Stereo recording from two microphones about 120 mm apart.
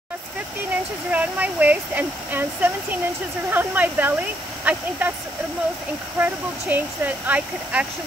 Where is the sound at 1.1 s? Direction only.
15° right (ahead or behind).